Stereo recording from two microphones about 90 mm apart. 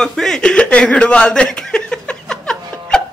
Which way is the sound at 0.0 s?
5° left (ahead or behind).